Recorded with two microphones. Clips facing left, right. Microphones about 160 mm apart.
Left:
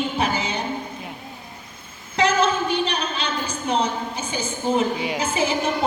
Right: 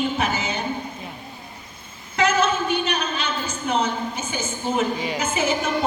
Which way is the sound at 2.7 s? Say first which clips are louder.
Even; 30° left (ahead or behind).